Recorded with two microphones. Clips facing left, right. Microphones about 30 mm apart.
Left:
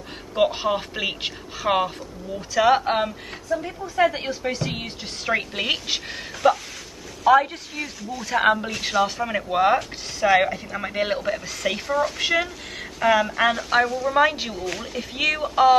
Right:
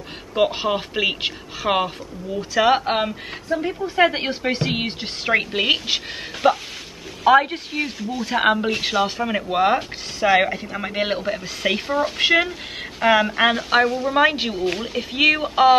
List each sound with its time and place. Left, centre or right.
0.3 s speech: centre
3.5 s a woman's voice: right
5.3 s speech: right
8.2 s speech: right
8.6 s speech: right
8.9 s speech: centre